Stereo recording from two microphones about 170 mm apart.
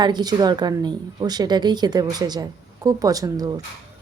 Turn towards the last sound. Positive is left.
turn(degrees=-20)  # may be behind; listen again after turning